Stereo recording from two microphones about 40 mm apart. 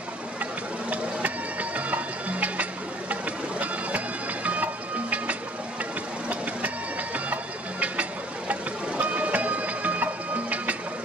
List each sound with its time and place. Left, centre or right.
0.4 s music: right
7.8 s music: right